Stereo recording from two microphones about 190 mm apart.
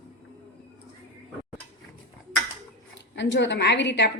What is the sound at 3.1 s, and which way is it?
Speech, 70° left (ahead or behind).